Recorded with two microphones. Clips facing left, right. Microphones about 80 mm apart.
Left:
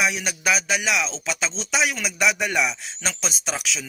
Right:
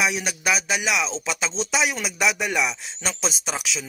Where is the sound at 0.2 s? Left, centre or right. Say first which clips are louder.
Left 1 dB; centre.